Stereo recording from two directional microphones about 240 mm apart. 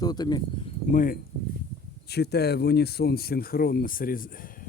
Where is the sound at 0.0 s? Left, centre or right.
Centre.